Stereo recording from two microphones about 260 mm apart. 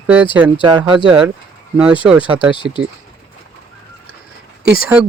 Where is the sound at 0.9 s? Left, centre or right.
Centre.